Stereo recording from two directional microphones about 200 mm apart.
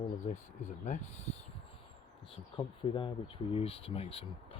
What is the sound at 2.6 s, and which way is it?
Speech, 25° left (ahead or behind).